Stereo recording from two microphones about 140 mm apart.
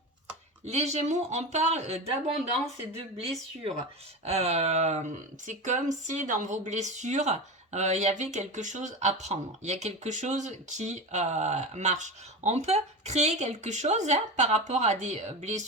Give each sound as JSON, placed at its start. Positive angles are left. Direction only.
{"t": 0.6, "sound": "speech", "side_deg": -50}
{"t": 4.3, "sound": "speech", "side_deg": -50}